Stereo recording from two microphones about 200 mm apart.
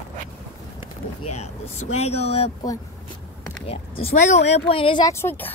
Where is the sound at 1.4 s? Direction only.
35° left (ahead or behind).